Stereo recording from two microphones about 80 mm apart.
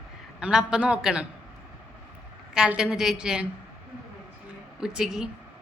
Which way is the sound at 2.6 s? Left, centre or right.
Centre.